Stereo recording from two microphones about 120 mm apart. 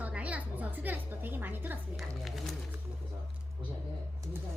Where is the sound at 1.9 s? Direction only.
Centre (ahead or behind).